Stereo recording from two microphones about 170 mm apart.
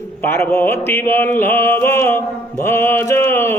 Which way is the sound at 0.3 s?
15° left (ahead or behind).